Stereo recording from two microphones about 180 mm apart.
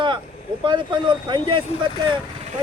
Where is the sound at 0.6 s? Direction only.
25° right (ahead or behind).